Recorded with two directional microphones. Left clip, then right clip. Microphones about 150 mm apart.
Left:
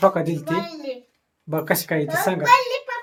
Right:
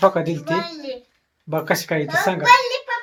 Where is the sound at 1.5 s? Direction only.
15° right (ahead or behind).